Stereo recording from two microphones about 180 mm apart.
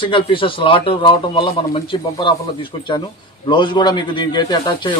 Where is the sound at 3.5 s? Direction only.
25° left (ahead or behind).